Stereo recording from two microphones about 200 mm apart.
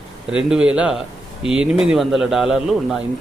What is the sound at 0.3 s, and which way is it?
Speech, 5° right (ahead or behind).